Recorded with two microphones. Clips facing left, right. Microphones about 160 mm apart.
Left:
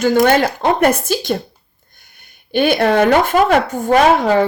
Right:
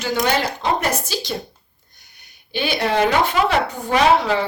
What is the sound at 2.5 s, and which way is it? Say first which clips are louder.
Speech: left 7 dB; 50° left (ahead or behind).